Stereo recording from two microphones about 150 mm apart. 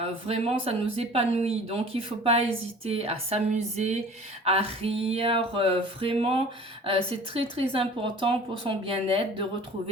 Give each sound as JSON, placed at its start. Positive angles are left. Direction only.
{"t": 0.0, "sound": "speech", "side_deg": -40}
{"t": 4.4, "sound": "speech", "side_deg": -40}